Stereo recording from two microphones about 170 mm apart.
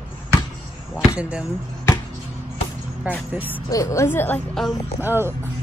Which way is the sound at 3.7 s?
20° left (ahead or behind).